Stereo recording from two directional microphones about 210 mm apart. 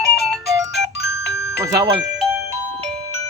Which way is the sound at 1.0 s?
55° left (ahead or behind).